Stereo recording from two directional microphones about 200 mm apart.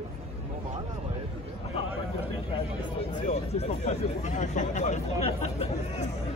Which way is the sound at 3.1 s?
35° left (ahead or behind).